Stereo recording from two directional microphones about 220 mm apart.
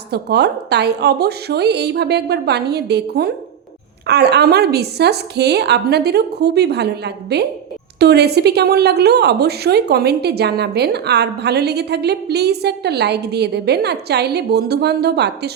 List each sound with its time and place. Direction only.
0.1 s a woman's voice: 50° right (ahead or behind)